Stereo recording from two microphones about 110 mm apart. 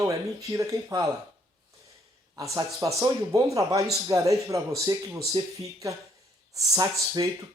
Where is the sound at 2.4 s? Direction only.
30° right (ahead or behind).